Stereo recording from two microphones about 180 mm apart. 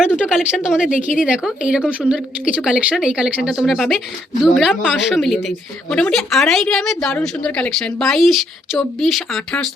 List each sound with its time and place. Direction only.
0.2 s speech: 5° right (ahead or behind)
0.8 s speech: 45° left (ahead or behind)
1.1 s a woman's voice: 5° right (ahead or behind)